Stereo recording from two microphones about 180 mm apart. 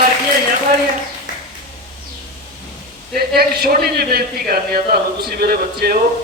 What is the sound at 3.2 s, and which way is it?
A man's voice, 60° right (ahead or behind).